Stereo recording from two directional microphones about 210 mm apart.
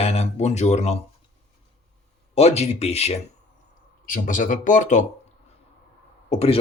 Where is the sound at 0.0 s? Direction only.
30° left (ahead or behind).